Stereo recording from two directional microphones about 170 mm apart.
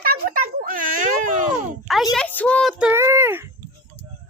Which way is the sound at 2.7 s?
10° right (ahead or behind).